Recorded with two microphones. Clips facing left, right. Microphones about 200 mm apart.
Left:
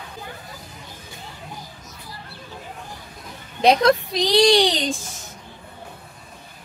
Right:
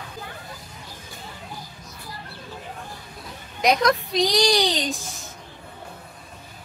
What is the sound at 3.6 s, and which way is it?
A child's voice, 30° left (ahead or behind).